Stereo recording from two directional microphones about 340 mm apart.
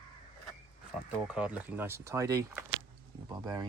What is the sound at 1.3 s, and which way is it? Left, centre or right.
Speech, centre.